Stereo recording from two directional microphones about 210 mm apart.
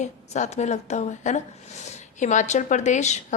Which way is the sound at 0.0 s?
35° left (ahead or behind).